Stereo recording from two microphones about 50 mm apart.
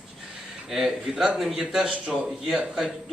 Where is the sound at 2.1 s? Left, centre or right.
Centre.